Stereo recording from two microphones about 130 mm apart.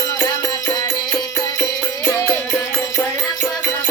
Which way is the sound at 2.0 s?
25° left (ahead or behind).